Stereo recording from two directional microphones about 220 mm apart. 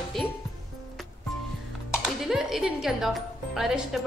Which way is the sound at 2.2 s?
Centre (ahead or behind).